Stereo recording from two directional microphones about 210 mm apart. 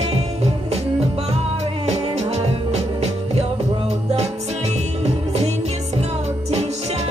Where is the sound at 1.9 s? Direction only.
30° right (ahead or behind).